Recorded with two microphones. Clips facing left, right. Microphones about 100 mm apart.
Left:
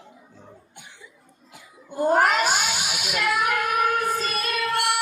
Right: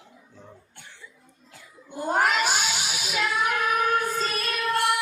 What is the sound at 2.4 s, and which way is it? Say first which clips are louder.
Child singing: left 2 dB; 45° left (ahead or behind).